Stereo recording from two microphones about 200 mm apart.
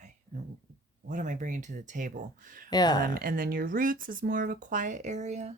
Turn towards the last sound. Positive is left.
turn(degrees=-35)  # may be behind; listen again after turning